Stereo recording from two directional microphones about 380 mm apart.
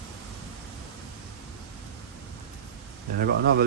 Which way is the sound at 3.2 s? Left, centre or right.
Right.